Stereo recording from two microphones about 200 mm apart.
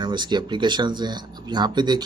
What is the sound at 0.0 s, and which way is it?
Speech, 20° right (ahead or behind).